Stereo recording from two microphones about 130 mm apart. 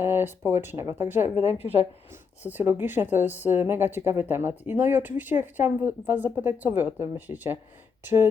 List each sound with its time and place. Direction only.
0.0 s speech: 15° right (ahead or behind)